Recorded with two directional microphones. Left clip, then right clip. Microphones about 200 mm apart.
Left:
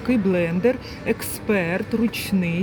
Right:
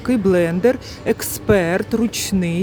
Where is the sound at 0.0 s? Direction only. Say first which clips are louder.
Right 5 dB; 25° right (ahead or behind).